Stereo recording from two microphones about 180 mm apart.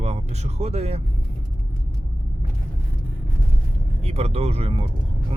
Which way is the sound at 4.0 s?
35° right (ahead or behind).